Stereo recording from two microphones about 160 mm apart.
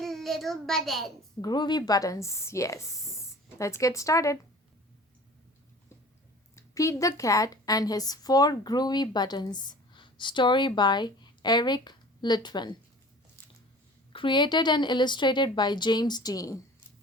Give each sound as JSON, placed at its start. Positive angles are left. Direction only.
{"t": 0.0, "sound": "a child's voice", "side_deg": 0}
{"t": 1.4, "sound": "speech", "side_deg": 25}
{"t": 6.6, "sound": "a woman's voice", "side_deg": 20}
{"t": 14.1, "sound": "speech", "side_deg": 30}